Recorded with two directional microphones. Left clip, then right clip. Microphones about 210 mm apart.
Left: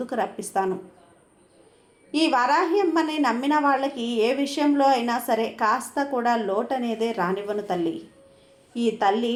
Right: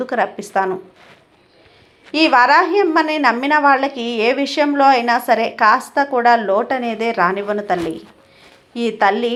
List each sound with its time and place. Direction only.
0.0 s a woman's voice: 25° right (ahead or behind)
2.1 s a woman's voice: 25° right (ahead or behind)